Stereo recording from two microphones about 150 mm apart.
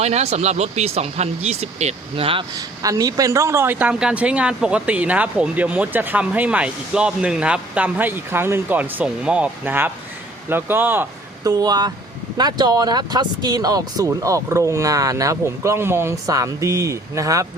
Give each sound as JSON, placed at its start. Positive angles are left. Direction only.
{"t": 0.0, "sound": "speech", "side_deg": -45}
{"t": 2.6, "sound": "a woman's voice", "side_deg": -25}
{"t": 11.4, "sound": "speech", "side_deg": -25}